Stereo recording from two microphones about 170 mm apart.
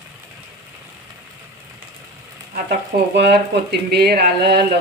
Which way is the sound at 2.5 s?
75° right (ahead or behind).